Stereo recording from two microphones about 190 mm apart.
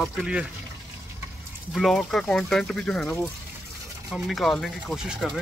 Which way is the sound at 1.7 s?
Centre (ahead or behind).